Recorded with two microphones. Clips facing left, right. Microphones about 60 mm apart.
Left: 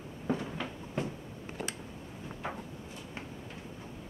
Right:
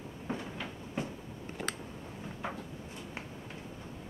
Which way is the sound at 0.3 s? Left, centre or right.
Centre.